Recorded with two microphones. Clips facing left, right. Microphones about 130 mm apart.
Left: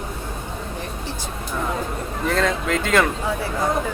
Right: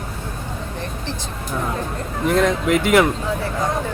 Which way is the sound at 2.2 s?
15° right (ahead or behind).